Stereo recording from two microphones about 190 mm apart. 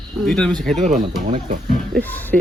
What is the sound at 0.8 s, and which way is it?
Speech, 40° right (ahead or behind).